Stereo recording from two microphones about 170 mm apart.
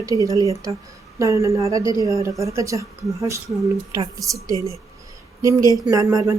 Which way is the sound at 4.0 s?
20° right (ahead or behind).